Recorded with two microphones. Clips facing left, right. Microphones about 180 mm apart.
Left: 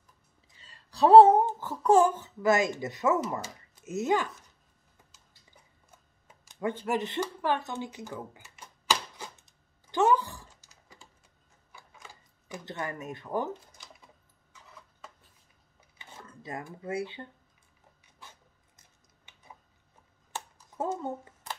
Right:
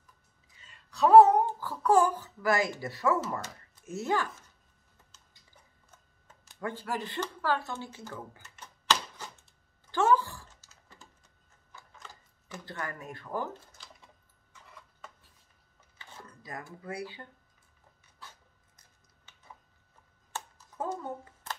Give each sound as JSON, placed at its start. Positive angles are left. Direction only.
{"t": 0.6, "sound": "speech", "side_deg": 35}
{"t": 5.9, "sound": "a sound", "side_deg": 15}
{"t": 9.8, "sound": "typing", "side_deg": 20}
{"t": 11.7, "sound": "camera", "side_deg": 10}
{"t": 12.7, "sound": "speech", "side_deg": 20}
{"t": 16.0, "sound": "dishes", "side_deg": 20}
{"t": 20.7, "sound": "speech", "side_deg": 25}